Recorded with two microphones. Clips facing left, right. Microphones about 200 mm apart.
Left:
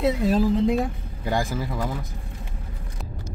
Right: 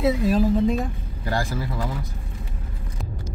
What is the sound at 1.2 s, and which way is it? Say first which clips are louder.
Speech: left 1 dB; 15° left (ahead or behind).